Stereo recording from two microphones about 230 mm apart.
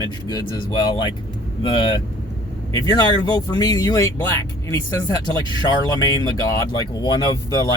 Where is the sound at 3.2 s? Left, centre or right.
Centre.